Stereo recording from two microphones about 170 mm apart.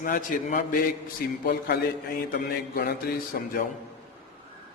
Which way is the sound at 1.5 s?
70° left (ahead or behind).